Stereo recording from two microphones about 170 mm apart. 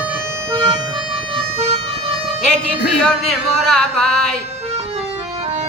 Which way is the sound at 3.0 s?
5° left (ahead or behind).